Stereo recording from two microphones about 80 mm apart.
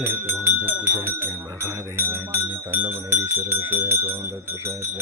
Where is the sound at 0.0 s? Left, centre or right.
Right.